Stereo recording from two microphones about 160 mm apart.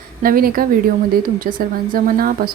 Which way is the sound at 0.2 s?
65° right (ahead or behind).